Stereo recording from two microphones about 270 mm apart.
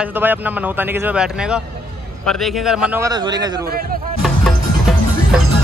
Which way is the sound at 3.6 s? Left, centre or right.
Right.